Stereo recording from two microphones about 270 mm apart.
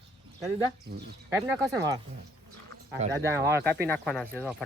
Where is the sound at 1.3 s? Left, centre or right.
Centre.